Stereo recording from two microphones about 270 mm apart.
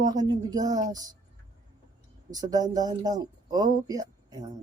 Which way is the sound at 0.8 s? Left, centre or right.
Centre.